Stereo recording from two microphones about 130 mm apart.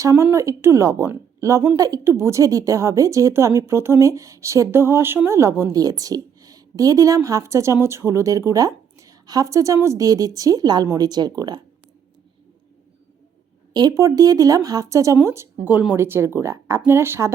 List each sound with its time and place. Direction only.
0.0 s a woman's voice: 20° right (ahead or behind)
13.7 s a woman's voice: 25° right (ahead or behind)